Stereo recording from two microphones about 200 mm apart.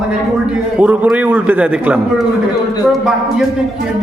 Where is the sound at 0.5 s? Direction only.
5° right (ahead or behind).